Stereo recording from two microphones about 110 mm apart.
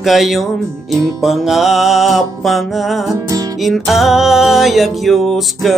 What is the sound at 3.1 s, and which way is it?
Music, 30° right (ahead or behind).